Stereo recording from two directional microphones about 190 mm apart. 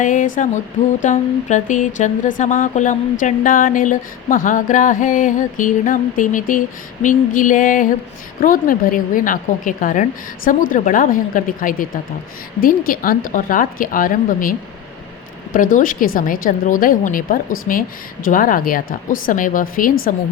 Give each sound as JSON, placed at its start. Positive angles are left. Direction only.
{"t": 0.0, "sound": "speech", "side_deg": 45}
{"t": 15.5, "sound": "speech", "side_deg": 45}